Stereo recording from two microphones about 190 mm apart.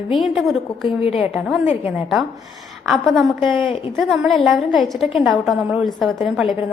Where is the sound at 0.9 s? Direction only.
30° left (ahead or behind).